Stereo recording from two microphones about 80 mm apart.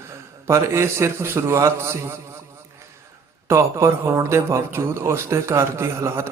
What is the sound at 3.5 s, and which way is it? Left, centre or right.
A man's voice, right.